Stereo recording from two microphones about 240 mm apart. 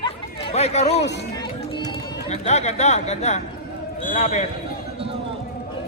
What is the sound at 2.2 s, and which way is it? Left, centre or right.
Speech, left.